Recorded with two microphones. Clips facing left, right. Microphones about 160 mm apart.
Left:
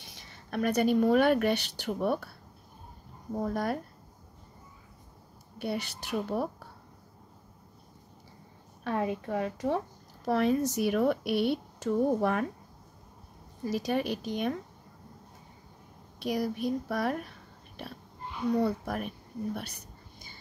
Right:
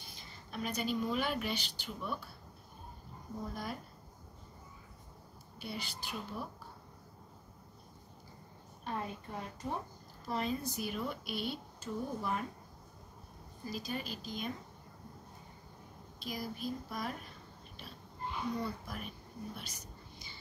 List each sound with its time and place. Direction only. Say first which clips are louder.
0.0 s speech: left 2 dB; 75° left (ahead or behind)
3.3 s a woman's voice: left 11 dB; 65° left (ahead or behind)
5.6 s a woman's voice: left 10 dB; 65° left (ahead or behind)
8.8 s a woman's voice: left 10 dB; 80° left
10.2 s speech: left 10 dB; 70° left (ahead or behind)
13.7 s speech: left 11 dB; 75° left (ahead or behind)
16.2 s speech: left 11 dB; 65° left (ahead or behind)